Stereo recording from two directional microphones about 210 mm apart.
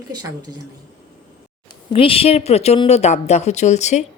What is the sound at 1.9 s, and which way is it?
Speech, 25° left (ahead or behind).